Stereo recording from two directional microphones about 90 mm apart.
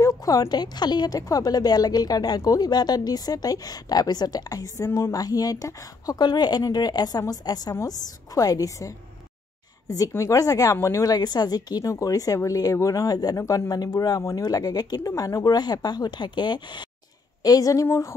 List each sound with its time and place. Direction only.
0.0 s a woman's voice: 40° left (ahead or behind)
13.4 s a woman's voice: 30° left (ahead or behind)
13.7 s a woman's voice: 45° left (ahead or behind)
17.4 s a woman's voice: 40° left (ahead or behind)
17.8 s speech: 30° left (ahead or behind)